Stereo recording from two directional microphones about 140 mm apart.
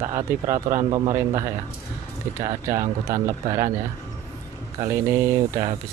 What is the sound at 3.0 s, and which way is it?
Speech, 20° right (ahead or behind).